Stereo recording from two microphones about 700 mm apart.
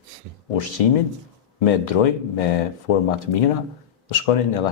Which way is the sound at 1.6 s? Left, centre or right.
Left.